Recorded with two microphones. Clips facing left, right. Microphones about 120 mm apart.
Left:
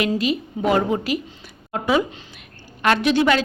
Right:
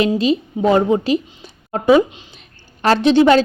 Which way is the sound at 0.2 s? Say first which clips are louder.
Right 6 dB; 25° right (ahead or behind).